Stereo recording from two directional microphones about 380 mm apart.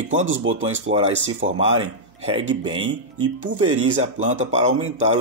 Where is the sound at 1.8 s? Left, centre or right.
Centre.